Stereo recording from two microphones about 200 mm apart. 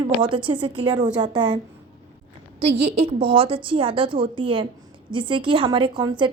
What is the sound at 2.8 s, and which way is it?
Speech, 30° right (ahead or behind).